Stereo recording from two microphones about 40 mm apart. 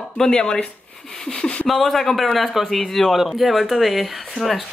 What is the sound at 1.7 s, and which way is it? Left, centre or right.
A man's voice, centre.